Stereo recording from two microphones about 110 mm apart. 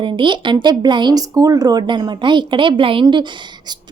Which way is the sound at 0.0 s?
50° right (ahead or behind).